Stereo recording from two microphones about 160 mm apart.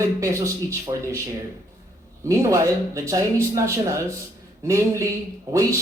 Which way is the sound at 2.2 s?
20° right (ahead or behind).